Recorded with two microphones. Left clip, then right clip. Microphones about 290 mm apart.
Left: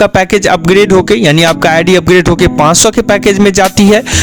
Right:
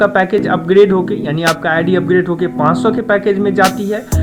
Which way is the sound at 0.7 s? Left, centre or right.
Left.